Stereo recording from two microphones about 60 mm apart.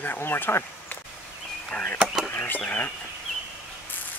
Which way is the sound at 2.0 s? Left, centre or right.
Centre.